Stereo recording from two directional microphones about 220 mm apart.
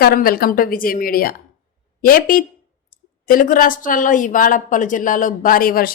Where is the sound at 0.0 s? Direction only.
40° left (ahead or behind).